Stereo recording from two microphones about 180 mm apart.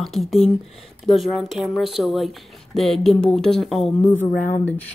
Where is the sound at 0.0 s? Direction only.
Centre (ahead or behind).